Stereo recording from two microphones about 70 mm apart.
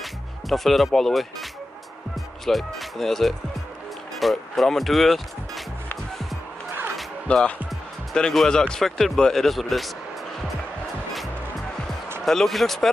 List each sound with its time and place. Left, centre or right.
0.0 s music: centre
2.4 s speech: centre
7.3 s speech: centre
8.1 s speech: centre
12.3 s speech: centre